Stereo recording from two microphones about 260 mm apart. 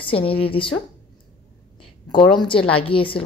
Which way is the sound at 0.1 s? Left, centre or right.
Left.